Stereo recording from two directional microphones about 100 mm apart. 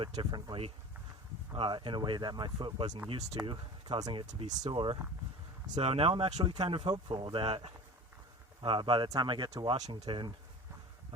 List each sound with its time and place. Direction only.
0.2 s speech: 45° right (ahead or behind)
1.5 s speech: 60° right (ahead or behind)
3.1 s speech: 90° right
3.4 s speech: 50° right (ahead or behind)
4.7 s speech: 60° right (ahead or behind)
5.8 s speech: 75° right (ahead or behind); by 10.3 s 50° right (ahead or behind)